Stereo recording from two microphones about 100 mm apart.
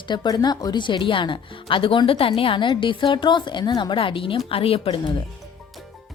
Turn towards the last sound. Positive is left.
turn(degrees=70)  # may be behind; listen again after turning